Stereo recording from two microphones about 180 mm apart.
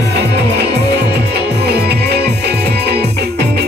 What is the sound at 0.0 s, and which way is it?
Music, 70° right (ahead or behind).